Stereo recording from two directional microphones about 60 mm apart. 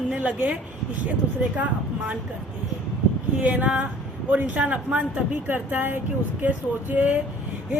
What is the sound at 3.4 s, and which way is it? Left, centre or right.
A woman's voice, right.